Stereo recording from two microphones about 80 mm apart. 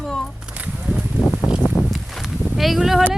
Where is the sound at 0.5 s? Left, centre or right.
Centre.